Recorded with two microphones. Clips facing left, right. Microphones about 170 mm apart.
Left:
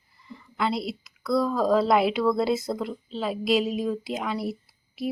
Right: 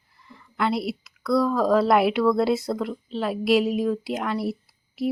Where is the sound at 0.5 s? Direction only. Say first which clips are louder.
Right 3 dB; 5° right (ahead or behind).